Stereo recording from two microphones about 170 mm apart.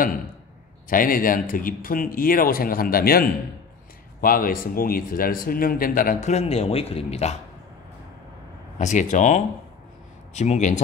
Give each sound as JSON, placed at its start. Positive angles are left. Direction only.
{"t": 0.8, "sound": "speech", "side_deg": 55}
{"t": 6.3, "sound": "speech", "side_deg": 40}
{"t": 8.7, "sound": "speech", "side_deg": 45}